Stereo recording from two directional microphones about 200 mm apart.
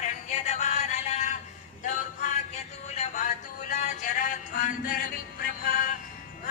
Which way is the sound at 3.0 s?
40° left (ahead or behind).